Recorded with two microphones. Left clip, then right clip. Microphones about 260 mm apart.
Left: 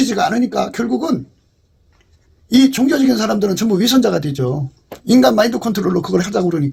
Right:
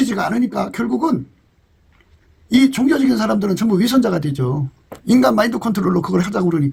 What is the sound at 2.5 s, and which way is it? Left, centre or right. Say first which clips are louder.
Speech: left 2 dB; right.